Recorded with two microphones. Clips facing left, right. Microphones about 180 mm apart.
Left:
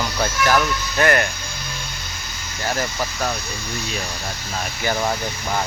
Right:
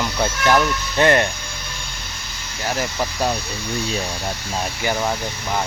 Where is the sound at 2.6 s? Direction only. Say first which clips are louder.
Right 1 dB; 15° right (ahead or behind).